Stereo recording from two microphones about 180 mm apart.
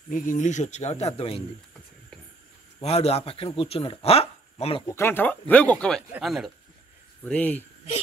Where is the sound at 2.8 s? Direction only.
35° left (ahead or behind).